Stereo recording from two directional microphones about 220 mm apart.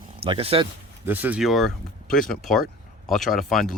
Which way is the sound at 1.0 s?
10° right (ahead or behind).